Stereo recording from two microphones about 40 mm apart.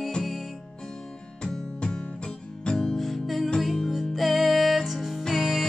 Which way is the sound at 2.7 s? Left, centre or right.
Centre.